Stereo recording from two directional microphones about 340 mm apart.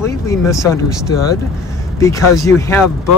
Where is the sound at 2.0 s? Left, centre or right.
Centre.